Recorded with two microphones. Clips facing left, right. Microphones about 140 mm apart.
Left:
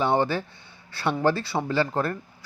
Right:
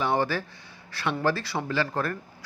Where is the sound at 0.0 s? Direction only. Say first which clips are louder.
Left 3 dB; 25° left (ahead or behind).